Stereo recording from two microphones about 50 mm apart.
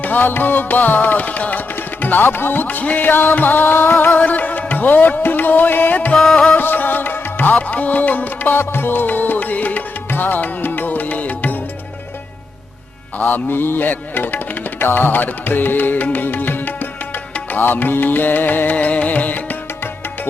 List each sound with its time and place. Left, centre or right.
0.0 s music: left
6.1 s music: centre
6.6 s music: left
8.5 s music: left
13.1 s music: left